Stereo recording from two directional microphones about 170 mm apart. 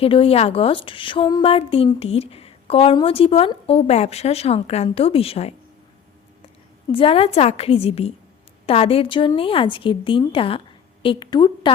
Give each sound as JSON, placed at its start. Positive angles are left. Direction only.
{"t": 0.0, "sound": "a woman's voice", "side_deg": 35}
{"t": 6.9, "sound": "a woman's voice", "side_deg": 35}